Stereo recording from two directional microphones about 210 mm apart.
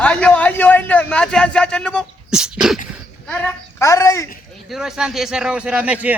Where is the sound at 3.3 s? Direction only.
15° left (ahead or behind).